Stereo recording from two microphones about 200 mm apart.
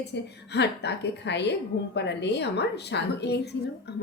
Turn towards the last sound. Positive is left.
turn(degrees=55)  # may be behind; listen again after turning